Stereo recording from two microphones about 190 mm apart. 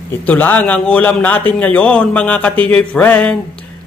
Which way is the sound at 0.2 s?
10° left (ahead or behind).